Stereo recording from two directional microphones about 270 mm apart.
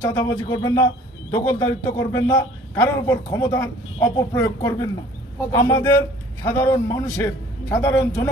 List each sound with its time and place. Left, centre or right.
0.0 s a man's voice: centre